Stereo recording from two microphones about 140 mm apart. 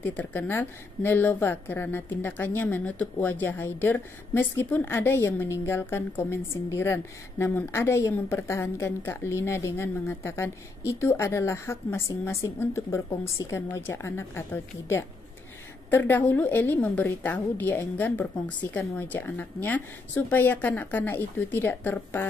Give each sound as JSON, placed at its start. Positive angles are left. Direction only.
{"t": 0.0, "sound": "a woman's voice", "side_deg": 10}